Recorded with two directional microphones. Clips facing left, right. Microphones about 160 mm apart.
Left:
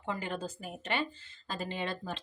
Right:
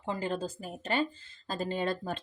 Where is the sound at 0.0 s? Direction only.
30° right (ahead or behind).